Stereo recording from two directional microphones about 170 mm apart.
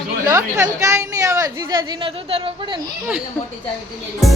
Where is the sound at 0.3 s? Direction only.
20° right (ahead or behind).